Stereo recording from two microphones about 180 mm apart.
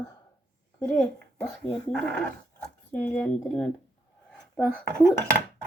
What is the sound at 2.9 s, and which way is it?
A child's voice, 10° left (ahead or behind).